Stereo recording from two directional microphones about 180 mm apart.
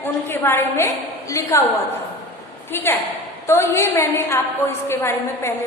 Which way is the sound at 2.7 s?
10° left (ahead or behind).